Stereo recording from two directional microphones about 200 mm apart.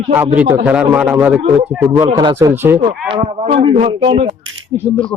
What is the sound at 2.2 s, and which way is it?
Speech, 20° right (ahead or behind).